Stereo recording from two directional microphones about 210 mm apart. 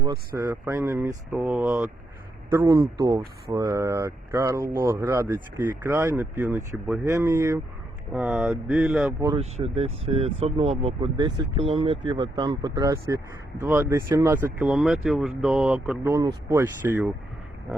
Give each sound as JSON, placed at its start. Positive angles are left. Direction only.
{"t": 0.3, "sound": "speech", "side_deg": -10}
{"t": 9.2, "sound": "speech", "side_deg": -25}